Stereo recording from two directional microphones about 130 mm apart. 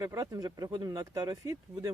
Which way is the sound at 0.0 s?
25° right (ahead or behind).